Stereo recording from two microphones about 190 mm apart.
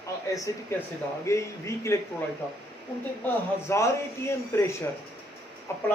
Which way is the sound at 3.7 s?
15° left (ahead or behind).